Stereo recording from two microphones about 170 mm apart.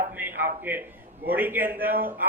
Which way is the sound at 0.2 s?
10° right (ahead or behind).